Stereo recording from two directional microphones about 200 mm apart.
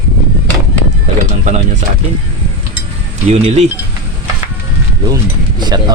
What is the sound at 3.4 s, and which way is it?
Speech, 35° right (ahead or behind).